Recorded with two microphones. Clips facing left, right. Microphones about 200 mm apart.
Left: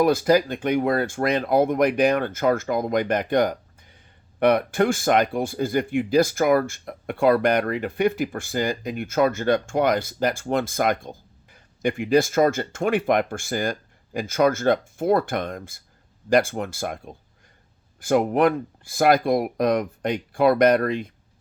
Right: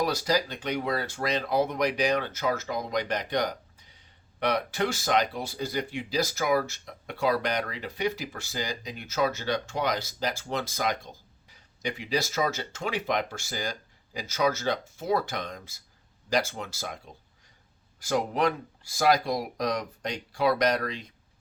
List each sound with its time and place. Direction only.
0.0 s speech: 55° left (ahead or behind)